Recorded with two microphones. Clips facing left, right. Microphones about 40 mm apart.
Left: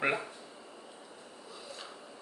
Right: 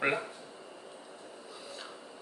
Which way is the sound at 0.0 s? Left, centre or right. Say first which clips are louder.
Right 1 dB; centre.